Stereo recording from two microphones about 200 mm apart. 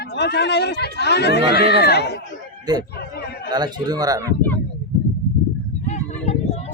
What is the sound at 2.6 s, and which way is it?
Speech, 20° right (ahead or behind).